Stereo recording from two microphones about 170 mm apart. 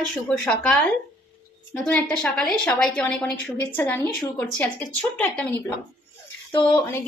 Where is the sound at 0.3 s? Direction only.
5° left (ahead or behind).